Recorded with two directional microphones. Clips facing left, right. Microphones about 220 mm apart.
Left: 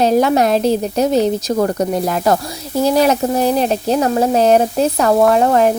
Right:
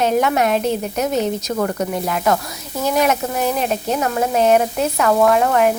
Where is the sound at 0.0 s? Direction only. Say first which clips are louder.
Left 4 dB; 35° left (ahead or behind).